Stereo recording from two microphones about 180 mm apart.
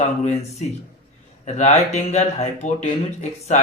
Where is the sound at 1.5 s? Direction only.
40° left (ahead or behind).